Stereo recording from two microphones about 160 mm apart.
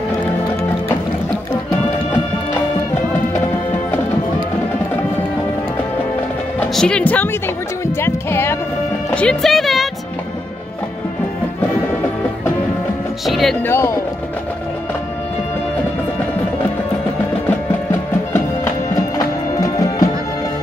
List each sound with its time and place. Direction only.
6.7 s speech: 5° left (ahead or behind)
7.8 s music: 15° left (ahead or behind)
13.2 s music: centre (ahead or behind)
13.7 s speech: 15° left (ahead or behind)
19.1 s music: 20° left (ahead or behind)